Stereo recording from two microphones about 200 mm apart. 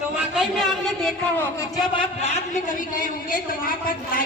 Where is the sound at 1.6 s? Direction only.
25° left (ahead or behind).